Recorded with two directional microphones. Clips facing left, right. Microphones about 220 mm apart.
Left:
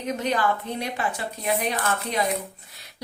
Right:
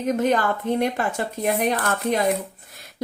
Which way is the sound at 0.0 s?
50° right (ahead or behind).